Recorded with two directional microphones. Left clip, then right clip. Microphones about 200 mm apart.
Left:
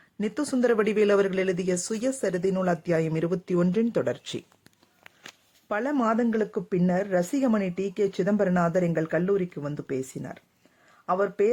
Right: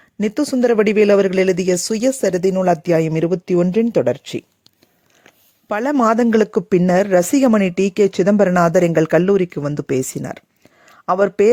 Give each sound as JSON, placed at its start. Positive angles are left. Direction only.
{"t": 0.2, "sound": "speech", "side_deg": -35}
{"t": 5.6, "sound": "speech", "side_deg": -45}
{"t": 10.8, "sound": "a sound", "side_deg": -45}